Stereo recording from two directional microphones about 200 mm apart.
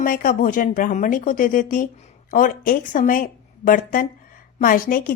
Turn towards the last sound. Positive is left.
turn(degrees=45)  # may be behind; listen again after turning